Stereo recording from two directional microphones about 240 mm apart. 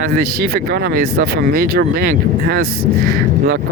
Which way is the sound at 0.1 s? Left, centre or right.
Right.